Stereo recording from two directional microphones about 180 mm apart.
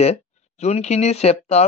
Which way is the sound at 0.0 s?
35° left (ahead or behind).